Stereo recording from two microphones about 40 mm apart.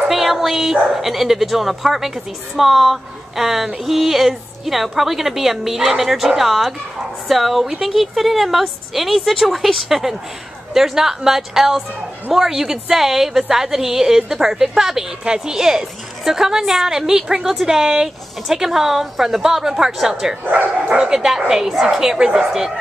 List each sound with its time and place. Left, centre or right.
0.1 s a woman's voice: centre
20.4 s speech: right
20.9 s a woman's voice: centre